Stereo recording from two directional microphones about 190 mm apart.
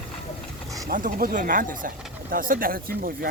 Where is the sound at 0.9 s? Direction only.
45° right (ahead or behind).